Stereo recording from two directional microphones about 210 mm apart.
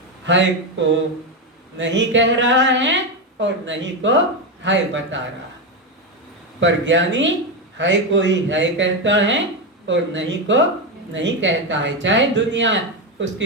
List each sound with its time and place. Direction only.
0.3 s speech: 60° right (ahead or behind)
1.8 s speech: 60° right (ahead or behind)
6.6 s speech: 60° right (ahead or behind)